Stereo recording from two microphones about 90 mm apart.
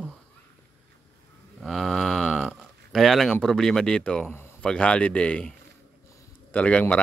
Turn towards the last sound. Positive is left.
turn(degrees=15)  # may be behind; listen again after turning